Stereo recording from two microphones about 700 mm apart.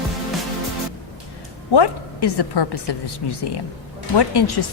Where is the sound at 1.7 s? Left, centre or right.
Left.